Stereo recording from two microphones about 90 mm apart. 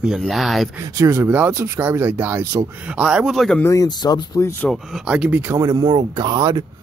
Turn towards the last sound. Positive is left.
turn(degrees=-50)  # may be behind; listen again after turning